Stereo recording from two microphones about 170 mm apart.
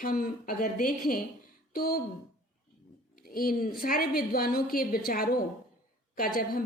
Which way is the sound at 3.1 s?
60° left (ahead or behind).